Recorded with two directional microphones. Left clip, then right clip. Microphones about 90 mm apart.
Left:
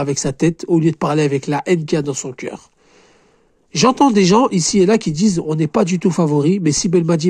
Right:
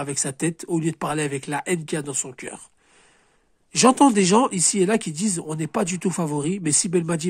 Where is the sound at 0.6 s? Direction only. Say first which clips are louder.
Left 8 dB; 25° left (ahead or behind).